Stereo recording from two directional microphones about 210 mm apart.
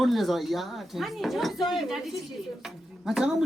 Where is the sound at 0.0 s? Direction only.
Centre (ahead or behind).